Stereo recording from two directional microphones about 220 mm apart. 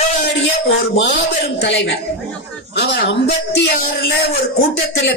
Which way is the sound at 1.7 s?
55° left (ahead or behind).